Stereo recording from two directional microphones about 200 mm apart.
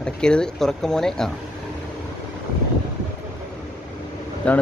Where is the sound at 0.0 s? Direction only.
5° left (ahead or behind).